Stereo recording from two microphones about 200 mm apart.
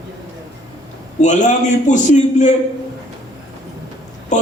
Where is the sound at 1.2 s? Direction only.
40° left (ahead or behind).